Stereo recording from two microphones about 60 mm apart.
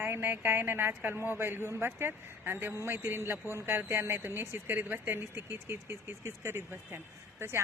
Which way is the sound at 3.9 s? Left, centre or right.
Right.